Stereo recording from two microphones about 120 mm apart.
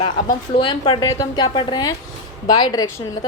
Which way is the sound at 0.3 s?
40° left (ahead or behind).